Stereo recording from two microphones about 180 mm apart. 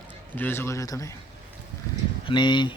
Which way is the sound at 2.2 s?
25° left (ahead or behind).